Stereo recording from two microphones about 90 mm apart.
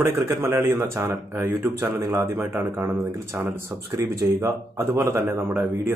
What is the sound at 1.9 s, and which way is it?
Speech, 40° right (ahead or behind).